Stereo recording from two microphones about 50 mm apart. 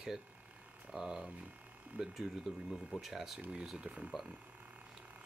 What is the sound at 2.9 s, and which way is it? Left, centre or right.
Speech, centre.